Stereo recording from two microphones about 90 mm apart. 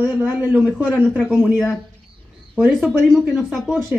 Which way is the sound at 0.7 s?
5° left (ahead or behind).